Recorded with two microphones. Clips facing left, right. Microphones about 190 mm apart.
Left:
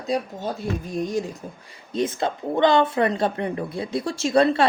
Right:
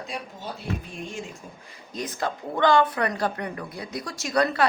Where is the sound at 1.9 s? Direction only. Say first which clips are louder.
Left 6 dB; 25° left (ahead or behind).